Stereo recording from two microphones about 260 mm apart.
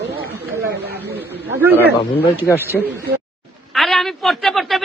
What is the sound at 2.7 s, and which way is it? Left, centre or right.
A man's voice, centre.